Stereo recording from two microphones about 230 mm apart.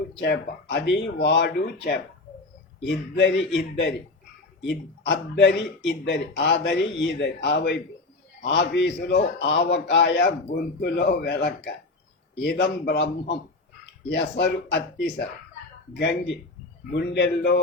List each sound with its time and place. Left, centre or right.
0.2 s a man's voice: left
14.1 s a man's voice: left
16.0 s a man's voice: left